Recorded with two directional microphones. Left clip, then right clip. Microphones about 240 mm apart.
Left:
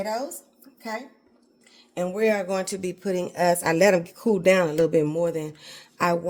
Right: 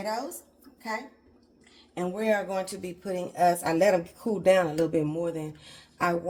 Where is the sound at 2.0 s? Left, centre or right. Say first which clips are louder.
Left 4 dB; left.